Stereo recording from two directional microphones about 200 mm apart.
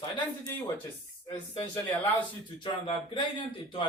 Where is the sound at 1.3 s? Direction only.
20° left (ahead or behind).